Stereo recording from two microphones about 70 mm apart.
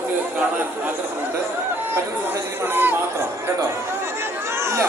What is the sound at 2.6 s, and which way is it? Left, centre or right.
Speech, right.